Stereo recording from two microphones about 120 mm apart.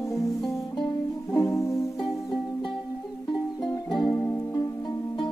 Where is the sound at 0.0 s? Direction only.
25° left (ahead or behind).